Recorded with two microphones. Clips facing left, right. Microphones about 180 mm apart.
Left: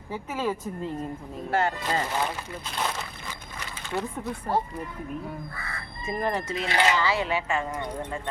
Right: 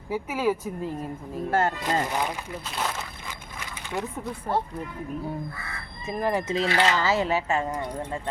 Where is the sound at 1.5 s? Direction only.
45° right (ahead or behind).